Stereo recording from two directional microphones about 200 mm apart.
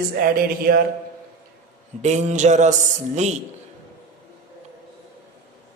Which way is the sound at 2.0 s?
35° right (ahead or behind).